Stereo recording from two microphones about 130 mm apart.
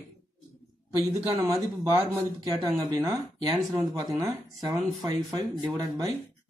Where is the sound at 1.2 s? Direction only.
15° right (ahead or behind).